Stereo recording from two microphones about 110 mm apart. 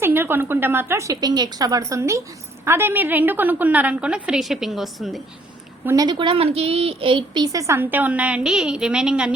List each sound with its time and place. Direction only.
0.0 s a woman's voice: 20° right (ahead or behind); by 5.2 s centre (ahead or behind)
6.0 s a woman's voice: 45° right (ahead or behind)
7.4 s a woman's voice: 30° right (ahead or behind); by 9.3 s 10° right (ahead or behind)